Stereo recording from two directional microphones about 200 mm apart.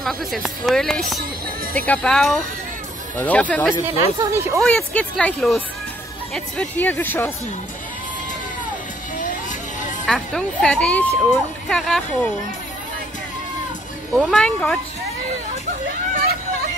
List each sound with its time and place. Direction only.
0.0 s speech: centre (ahead or behind)
4.0 s speech: 15° right (ahead or behind)
4.6 s speech: 5° left (ahead or behind)
9.1 s music: 40° left (ahead or behind)
10.0 s speech: 5° left (ahead or behind)
14.1 s speech: 5° left (ahead or behind)